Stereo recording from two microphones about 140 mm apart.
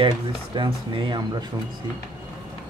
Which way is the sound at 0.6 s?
35° right (ahead or behind).